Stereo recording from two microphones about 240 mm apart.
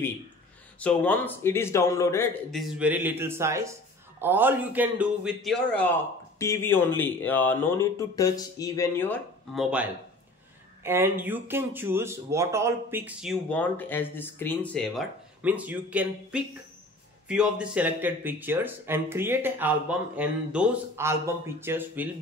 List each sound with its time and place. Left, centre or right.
0.7 s speech: centre
2.6 s speech: centre